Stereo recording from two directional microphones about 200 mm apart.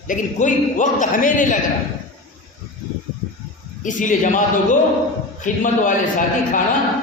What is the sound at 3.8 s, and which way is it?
A man's voice, 40° left (ahead or behind).